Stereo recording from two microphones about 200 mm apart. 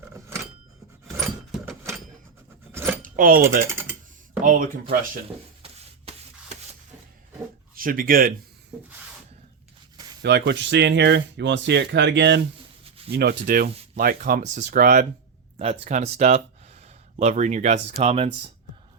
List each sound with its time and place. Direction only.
1.0 s keys jangling: centre (ahead or behind)
3.0 s keys jangling: 45° right (ahead or behind)
3.7 s typing: 10° right (ahead or behind)
4.4 s speech: 45° right (ahead or behind)
6.1 s rub: 30° right (ahead or behind)
7.8 s speech: 45° right (ahead or behind)
10.2 s speech: 60° right (ahead or behind)
15.5 s speech: 30° right (ahead or behind)